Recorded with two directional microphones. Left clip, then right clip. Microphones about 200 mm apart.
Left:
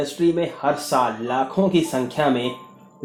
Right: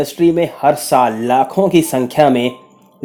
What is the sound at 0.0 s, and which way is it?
Speech, 50° right (ahead or behind).